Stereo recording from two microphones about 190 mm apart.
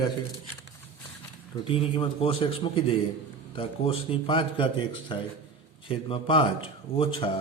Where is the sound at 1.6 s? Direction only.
25° left (ahead or behind).